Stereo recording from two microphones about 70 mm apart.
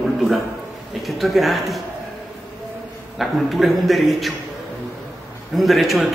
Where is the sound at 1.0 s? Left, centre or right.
Centre.